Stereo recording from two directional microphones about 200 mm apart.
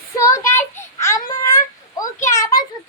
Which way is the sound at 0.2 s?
15° left (ahead or behind).